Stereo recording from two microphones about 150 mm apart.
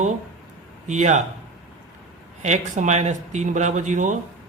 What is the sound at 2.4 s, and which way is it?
Speech, 55° right (ahead or behind).